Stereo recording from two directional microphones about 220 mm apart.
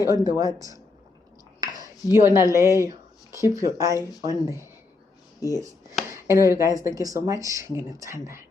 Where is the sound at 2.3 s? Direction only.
15° right (ahead or behind).